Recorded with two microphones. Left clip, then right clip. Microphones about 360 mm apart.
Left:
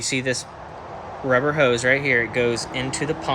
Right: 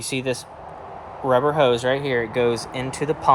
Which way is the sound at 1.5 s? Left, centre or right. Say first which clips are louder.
Even; right.